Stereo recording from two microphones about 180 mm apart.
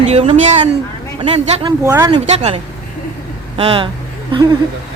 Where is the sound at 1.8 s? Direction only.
15° right (ahead or behind).